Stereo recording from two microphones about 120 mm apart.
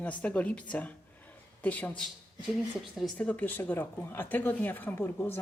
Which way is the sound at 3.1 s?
10° left (ahead or behind).